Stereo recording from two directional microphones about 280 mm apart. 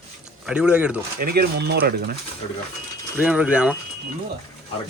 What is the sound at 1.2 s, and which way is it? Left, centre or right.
Speech, right.